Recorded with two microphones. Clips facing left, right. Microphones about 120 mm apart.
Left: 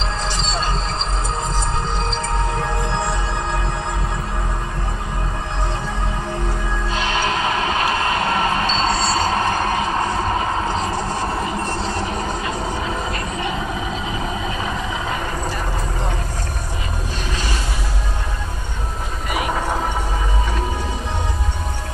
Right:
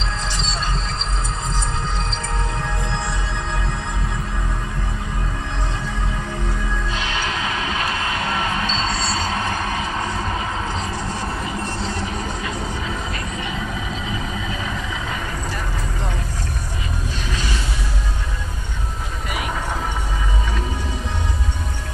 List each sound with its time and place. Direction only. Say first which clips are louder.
7.2 s train: left 6 dB; 40° left (ahead or behind)